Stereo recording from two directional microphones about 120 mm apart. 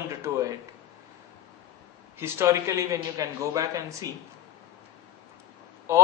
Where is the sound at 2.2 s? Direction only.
20° right (ahead or behind).